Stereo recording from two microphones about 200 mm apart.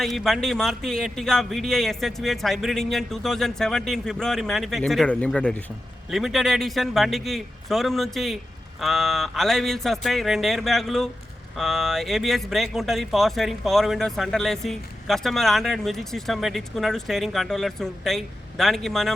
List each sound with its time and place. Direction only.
0.0 s speech: centre (ahead or behind)